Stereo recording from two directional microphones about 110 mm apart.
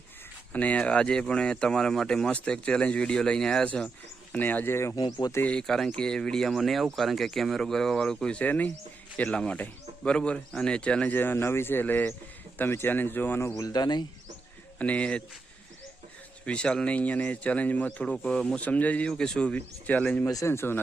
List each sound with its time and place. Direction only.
0.5 s speech: 15° left (ahead or behind)
4.9 s speech: 35° left (ahead or behind)
5.3 s speech: 15° left (ahead or behind)
13.6 s speech: 35° left (ahead or behind)
14.8 s speech: 10° left (ahead or behind)
16.5 s speech: 10° left (ahead or behind)
20.2 s speech: 25° left (ahead or behind)